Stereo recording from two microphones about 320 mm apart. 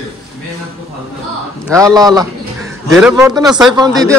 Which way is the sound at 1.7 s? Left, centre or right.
Centre.